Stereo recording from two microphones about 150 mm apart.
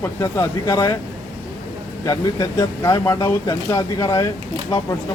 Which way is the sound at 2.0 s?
25° left (ahead or behind).